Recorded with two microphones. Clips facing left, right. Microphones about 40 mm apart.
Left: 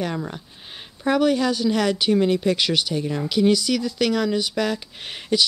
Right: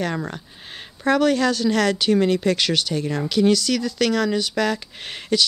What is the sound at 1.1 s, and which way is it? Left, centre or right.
Speech, centre.